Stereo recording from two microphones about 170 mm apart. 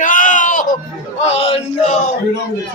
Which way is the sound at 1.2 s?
35° left (ahead or behind).